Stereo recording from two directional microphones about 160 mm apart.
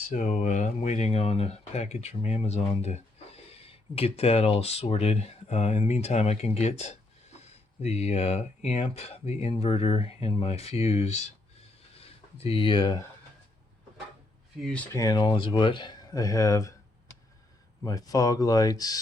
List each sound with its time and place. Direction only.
0.1 s speech: 50° left (ahead or behind)
11.9 s a sound: 35° left (ahead or behind)
14.6 s speech: 5° left (ahead or behind)
14.9 s speech: 25° left (ahead or behind)
17.8 s speech: 25° left (ahead or behind)